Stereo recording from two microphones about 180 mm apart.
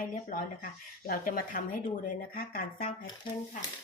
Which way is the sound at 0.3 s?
50° left (ahead or behind).